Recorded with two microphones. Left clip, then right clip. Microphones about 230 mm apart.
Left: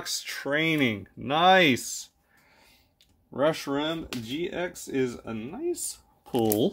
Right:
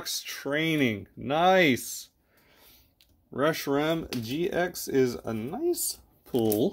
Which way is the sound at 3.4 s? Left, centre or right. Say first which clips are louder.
Even; centre.